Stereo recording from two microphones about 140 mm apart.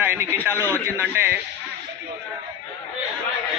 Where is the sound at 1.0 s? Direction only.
15° right (ahead or behind).